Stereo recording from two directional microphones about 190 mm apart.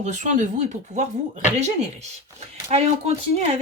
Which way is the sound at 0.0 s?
40° right (ahead or behind).